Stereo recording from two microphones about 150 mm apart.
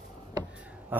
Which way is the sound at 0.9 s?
10° right (ahead or behind).